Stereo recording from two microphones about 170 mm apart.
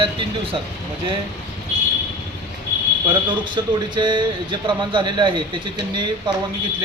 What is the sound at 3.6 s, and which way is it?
A man's voice, 25° right (ahead or behind).